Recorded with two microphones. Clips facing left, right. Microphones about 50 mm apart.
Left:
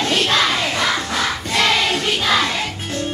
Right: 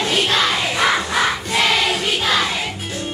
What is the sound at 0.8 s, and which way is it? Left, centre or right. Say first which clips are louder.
Battle cry: right 3 dB; centre.